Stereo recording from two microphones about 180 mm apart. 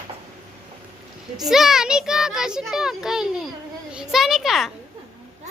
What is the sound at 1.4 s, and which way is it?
A child's voice, centre (ahead or behind).